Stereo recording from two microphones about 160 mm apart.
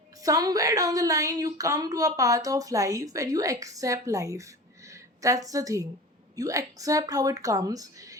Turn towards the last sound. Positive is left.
turn(degrees=-20)  # may be behind; listen again after turning